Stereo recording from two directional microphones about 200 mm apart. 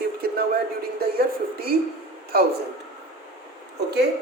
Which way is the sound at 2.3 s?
50° right (ahead or behind).